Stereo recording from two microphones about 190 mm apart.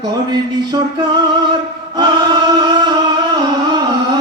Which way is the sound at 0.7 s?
25° right (ahead or behind).